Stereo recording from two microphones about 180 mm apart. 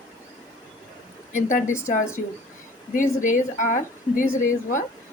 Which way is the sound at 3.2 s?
45° left (ahead or behind).